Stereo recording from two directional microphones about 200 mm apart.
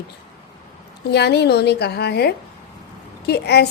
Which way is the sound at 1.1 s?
55° left (ahead or behind).